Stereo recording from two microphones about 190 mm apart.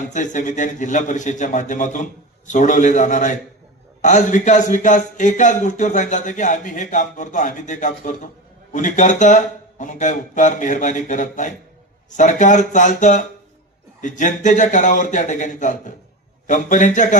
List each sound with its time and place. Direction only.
0.0 s speech: 40° left (ahead or behind)